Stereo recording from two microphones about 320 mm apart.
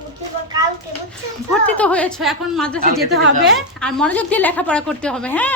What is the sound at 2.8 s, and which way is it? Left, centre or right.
Speech, right.